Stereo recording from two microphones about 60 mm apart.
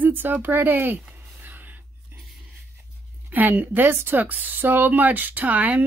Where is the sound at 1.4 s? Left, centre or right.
Right.